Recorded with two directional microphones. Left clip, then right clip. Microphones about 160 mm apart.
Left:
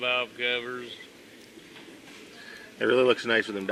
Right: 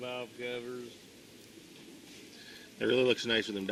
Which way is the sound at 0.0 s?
35° left (ahead or behind).